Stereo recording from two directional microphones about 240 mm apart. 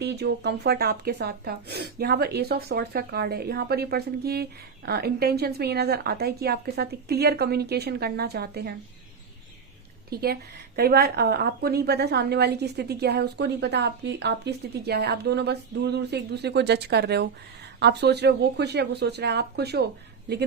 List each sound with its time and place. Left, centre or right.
0.0 s speech: right
10.1 s a woman's voice: right